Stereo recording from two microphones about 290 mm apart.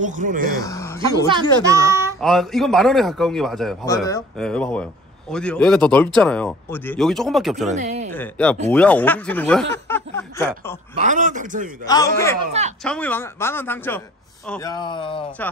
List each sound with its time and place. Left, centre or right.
0.0 s a man's voice: right
0.6 s a sound: centre
1.6 s a child's voice: centre
3.8 s a woman's voice: centre
7.7 s speech: right
8.1 s a woman's voice: centre
11.0 s a man's voice: right
11.8 s a woman's voice: centre